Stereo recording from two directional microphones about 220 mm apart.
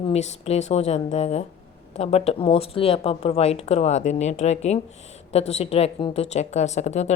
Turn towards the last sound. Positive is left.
turn(degrees=30)  # may be behind; listen again after turning